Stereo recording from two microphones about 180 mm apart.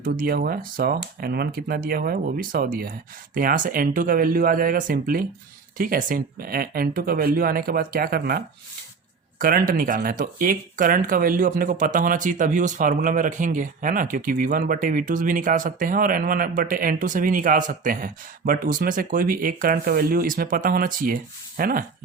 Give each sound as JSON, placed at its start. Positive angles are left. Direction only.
{"t": 0.0, "sound": "speech", "side_deg": -55}